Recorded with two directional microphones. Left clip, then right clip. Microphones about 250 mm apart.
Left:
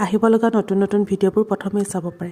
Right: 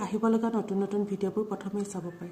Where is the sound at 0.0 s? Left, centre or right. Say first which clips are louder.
Left 12 dB; left.